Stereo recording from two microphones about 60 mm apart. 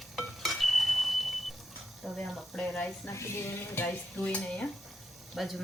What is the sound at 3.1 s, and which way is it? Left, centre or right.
Speech, left.